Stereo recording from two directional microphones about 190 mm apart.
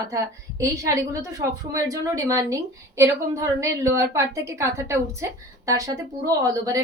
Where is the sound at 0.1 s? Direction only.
15° right (ahead or behind).